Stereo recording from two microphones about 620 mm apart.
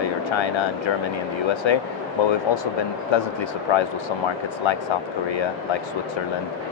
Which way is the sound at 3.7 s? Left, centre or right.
Left.